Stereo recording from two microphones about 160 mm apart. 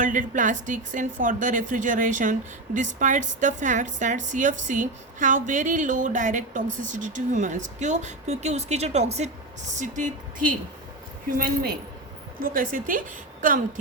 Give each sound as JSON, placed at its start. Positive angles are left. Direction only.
{"t": 0.0, "sound": "a woman's voice", "side_deg": -55}
{"t": 11.3, "sound": "speech", "side_deg": -65}
{"t": 12.4, "sound": "a woman's voice", "side_deg": -60}